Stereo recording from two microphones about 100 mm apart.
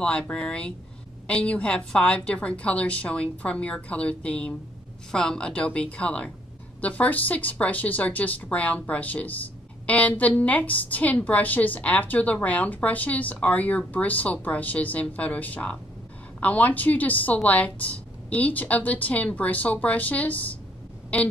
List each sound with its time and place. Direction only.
0.0 s speech: 10° left (ahead or behind)